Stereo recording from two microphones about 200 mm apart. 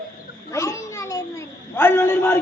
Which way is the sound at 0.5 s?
15° left (ahead or behind).